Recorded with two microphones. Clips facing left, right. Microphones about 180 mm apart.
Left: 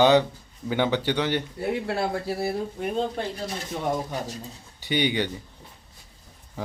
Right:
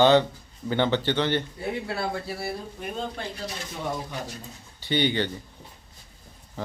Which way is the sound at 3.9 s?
45° left (ahead or behind).